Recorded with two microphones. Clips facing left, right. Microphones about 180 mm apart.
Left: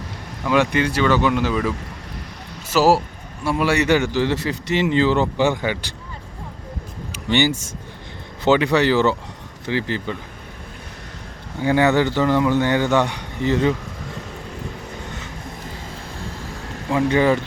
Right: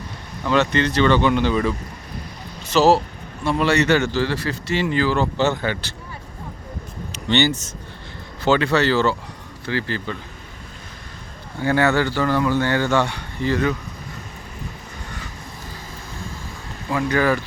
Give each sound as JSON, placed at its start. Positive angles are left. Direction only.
{"t": 0.4, "sound": "a man's voice", "side_deg": 10}
{"t": 7.1, "sound": "a man's voice", "side_deg": 10}
{"t": 11.6, "sound": "a man's voice", "side_deg": 15}
{"t": 16.9, "sound": "speech", "side_deg": 25}